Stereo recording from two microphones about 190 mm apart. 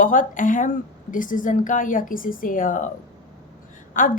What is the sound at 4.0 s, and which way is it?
Speech, 45° left (ahead or behind).